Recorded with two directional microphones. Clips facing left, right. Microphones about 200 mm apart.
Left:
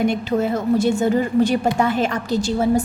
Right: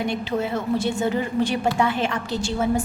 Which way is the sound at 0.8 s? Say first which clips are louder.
Left 5 dB; 45° left (ahead or behind).